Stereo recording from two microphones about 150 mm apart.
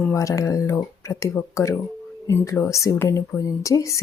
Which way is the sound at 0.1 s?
20° left (ahead or behind).